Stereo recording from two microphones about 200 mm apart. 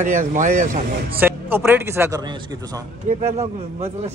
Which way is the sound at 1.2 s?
10° right (ahead or behind).